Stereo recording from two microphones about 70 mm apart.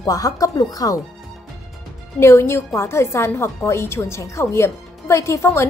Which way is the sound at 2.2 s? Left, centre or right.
Left.